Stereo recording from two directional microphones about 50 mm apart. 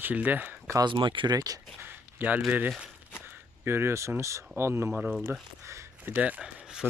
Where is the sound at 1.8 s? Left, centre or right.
Right.